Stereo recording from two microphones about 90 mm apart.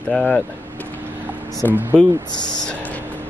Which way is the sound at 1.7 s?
20° right (ahead or behind).